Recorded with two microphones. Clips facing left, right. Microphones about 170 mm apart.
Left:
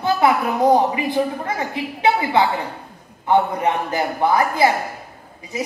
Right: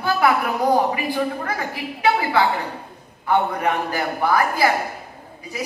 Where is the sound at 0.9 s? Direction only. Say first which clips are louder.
Left 2 dB; 20° left (ahead or behind).